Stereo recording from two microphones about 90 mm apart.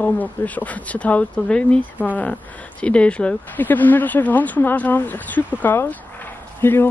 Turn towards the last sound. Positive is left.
turn(degrees=25)  # may be behind; listen again after turning